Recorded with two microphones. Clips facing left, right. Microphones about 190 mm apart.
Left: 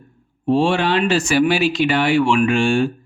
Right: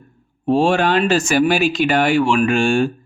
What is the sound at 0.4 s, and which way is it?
A man's voice, 45° right (ahead or behind).